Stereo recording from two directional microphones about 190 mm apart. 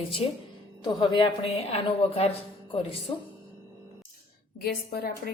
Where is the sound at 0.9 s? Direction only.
25° left (ahead or behind).